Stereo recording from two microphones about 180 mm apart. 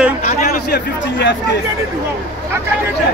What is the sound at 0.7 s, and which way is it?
Speech, 70° left (ahead or behind).